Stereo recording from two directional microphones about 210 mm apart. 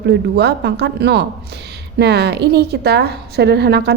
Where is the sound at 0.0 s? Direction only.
50° right (ahead or behind).